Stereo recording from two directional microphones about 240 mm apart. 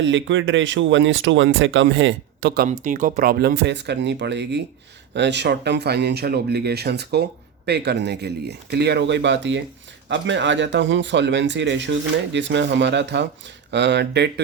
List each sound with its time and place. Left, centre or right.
0.0 s speech: right
2.6 s speech: right